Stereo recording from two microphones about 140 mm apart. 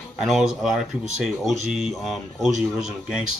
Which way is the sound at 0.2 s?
Centre (ahead or behind).